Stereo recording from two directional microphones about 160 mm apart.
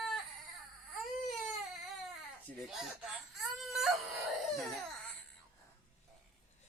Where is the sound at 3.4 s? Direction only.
Centre (ahead or behind).